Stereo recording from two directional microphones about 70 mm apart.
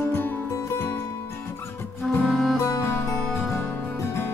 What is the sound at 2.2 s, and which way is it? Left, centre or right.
Music, centre.